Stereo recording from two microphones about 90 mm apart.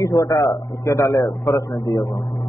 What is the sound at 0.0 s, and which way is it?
A man's voice, 40° left (ahead or behind).